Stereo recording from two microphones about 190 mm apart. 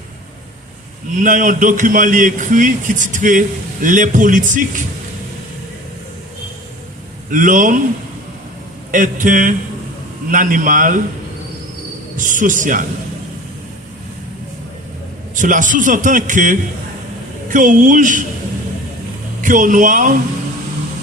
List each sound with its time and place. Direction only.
1.2 s a man's voice: 45° right (ahead or behind)
7.3 s a man's voice: 45° right (ahead or behind)
8.9 s a man's voice: 45° right (ahead or behind)
12.1 s a man's voice: 45° right (ahead or behind)
15.4 s a man's voice: 45° right (ahead or behind)
19.4 s a man's voice: 45° right (ahead or behind)